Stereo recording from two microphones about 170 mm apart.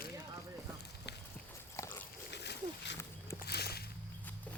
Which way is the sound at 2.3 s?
85° left.